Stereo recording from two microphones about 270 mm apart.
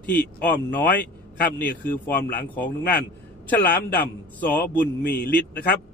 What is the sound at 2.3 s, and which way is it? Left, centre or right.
A man's voice, centre.